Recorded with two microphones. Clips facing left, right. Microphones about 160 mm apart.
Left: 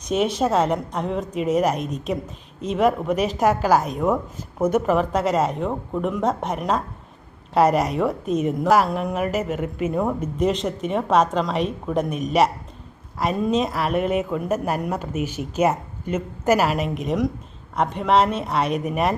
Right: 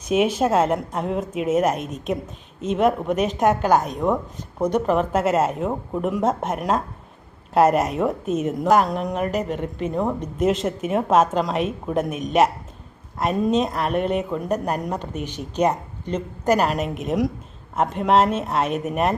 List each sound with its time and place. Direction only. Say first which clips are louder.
0.1 s a woman's voice: right 1 dB; 5° right (ahead or behind)